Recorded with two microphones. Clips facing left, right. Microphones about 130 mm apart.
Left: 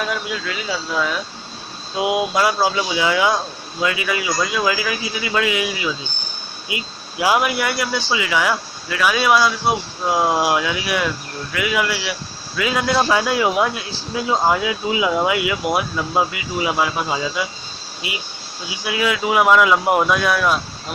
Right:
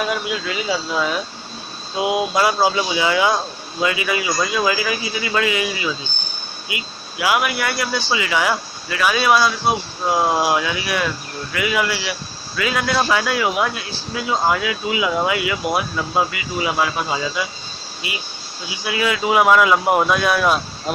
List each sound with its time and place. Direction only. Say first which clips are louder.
0.0 s speech: right 2 dB; 10° right (ahead or behind)
2.0 s speech: even; 10° left (ahead or behind)
2.3 s speech: right 1 dB; centre (ahead or behind)
6.7 s speech: left 3 dB; 30° left (ahead or behind); by 12.1 s 5° left (ahead or behind)
12.5 s speech: left 1 dB; 15° left (ahead or behind)
15.2 s speech: left 1 dB; 15° left (ahead or behind)
18.9 s speech: even; 5° left (ahead or behind)